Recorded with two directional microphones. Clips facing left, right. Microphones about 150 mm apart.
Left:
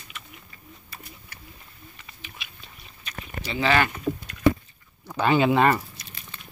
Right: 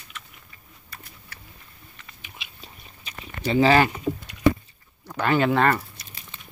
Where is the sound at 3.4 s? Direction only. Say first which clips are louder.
Right 5 dB; 35° right (ahead or behind).